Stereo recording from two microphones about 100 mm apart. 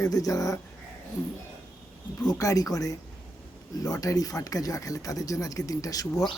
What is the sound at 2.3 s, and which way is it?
Speech, 35° left (ahead or behind).